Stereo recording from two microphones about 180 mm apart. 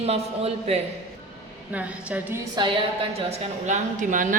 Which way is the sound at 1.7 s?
10° right (ahead or behind).